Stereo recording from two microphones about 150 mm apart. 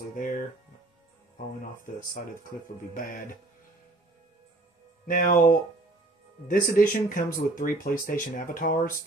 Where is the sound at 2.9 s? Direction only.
70° left (ahead or behind).